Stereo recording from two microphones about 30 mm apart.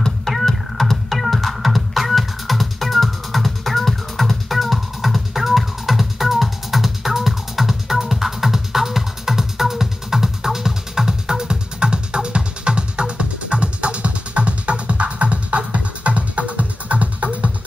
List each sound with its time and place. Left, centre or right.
0.3 s music: centre; by 17.5 s right